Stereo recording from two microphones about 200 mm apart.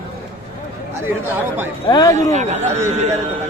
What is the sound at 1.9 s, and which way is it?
Speech, 20° left (ahead or behind).